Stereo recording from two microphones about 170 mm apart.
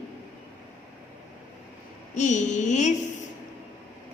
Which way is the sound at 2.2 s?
45° left (ahead or behind).